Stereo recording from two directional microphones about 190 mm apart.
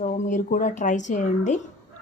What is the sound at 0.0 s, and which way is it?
Speech, 40° left (ahead or behind).